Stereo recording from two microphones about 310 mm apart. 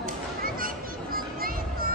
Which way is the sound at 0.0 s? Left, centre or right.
Right.